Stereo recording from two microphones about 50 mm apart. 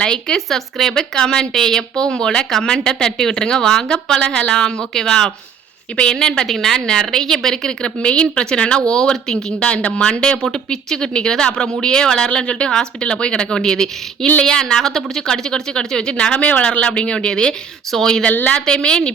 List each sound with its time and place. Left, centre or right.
0.0 s a woman's voice: centre
18.3 s a woman's voice: left
18.5 s a woman's voice: centre